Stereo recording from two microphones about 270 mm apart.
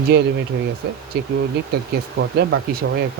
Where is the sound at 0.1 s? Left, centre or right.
Right.